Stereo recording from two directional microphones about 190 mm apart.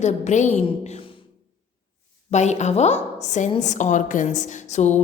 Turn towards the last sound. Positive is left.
turn(degrees=35)  # may be behind; listen again after turning